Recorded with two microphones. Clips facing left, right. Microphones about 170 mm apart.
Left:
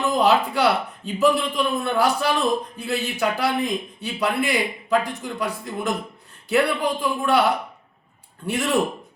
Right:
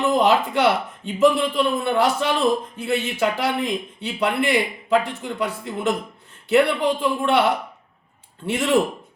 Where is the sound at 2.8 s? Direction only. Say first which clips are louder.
Right 3 dB; 80° right.